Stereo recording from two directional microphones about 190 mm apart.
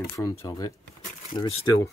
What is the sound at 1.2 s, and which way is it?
Speech, 30° left (ahead or behind).